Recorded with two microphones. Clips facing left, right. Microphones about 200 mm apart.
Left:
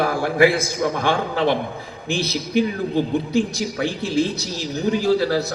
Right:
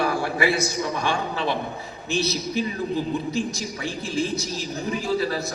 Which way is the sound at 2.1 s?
90° left.